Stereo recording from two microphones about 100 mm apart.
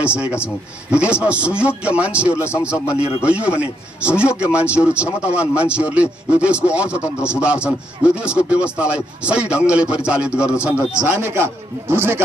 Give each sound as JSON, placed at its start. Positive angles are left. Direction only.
{"t": 0.0, "sound": "speech", "side_deg": -10}
{"t": 11.2, "sound": "a man's voice", "side_deg": -25}